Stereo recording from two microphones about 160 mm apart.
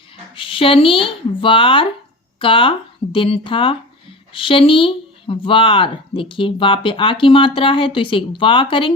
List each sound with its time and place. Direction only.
0.3 s speech: 35° left (ahead or behind)